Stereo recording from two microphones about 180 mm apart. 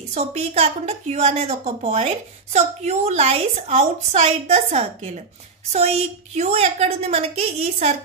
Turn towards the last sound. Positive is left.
turn(degrees=-35)  # may be behind; listen again after turning